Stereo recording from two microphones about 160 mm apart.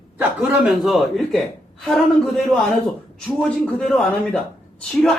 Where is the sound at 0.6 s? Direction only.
Centre (ahead or behind).